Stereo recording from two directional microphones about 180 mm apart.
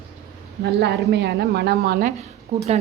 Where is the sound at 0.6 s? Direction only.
65° right (ahead or behind).